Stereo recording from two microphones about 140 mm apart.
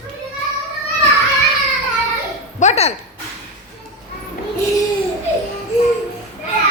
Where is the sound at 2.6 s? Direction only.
50° left (ahead or behind).